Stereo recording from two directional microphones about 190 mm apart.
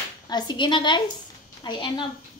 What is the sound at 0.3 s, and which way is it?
A woman's voice, 25° left (ahead or behind).